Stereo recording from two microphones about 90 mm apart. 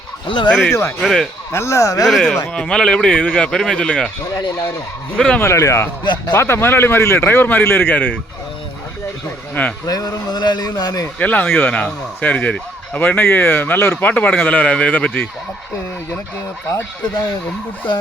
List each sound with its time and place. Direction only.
0.3 s speech: 65° left (ahead or behind)
0.7 s speech: 30° left (ahead or behind)
1.0 s speech: centre (ahead or behind)
1.5 s speech: 35° left (ahead or behind)
2.0 s speech: 5° left (ahead or behind)
5.1 s speech: 10° left (ahead or behind)
5.4 s speech: 35° left (ahead or behind)
6.0 s speech: 55° left (ahead or behind)
6.3 s speech: 25° left (ahead or behind)
9.8 s speech: 45° left (ahead or behind)
11.2 s speech: 15° left (ahead or behind)